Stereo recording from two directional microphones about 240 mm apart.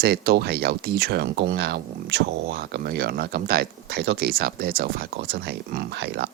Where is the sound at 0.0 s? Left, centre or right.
Right.